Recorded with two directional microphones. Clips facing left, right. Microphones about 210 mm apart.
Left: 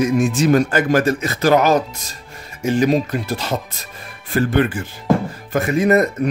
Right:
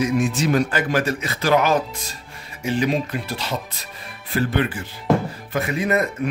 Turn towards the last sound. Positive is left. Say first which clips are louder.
# left 6 dB
turn(degrees=40)  # may be behind; listen again after turning